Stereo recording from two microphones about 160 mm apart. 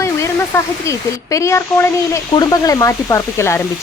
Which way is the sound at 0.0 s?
20° left (ahead or behind).